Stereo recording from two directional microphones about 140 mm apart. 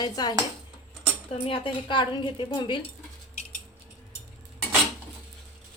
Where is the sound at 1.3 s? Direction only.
40° left (ahead or behind).